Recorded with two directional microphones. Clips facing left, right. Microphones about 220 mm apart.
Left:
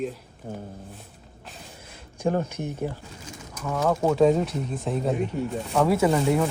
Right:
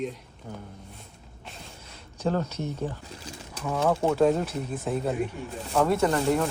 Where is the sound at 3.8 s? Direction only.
Centre (ahead or behind).